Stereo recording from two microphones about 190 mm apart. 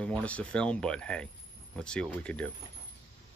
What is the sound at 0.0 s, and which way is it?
Speech, 5° left (ahead or behind).